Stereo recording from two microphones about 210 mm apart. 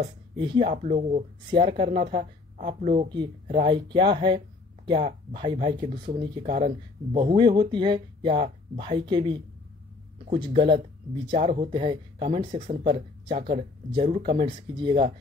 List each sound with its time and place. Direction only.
0.4 s speech: 25° right (ahead or behind)
0.7 s speech: 35° right (ahead or behind)